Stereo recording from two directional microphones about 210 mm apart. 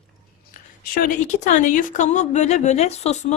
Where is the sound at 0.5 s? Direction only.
45° left (ahead or behind).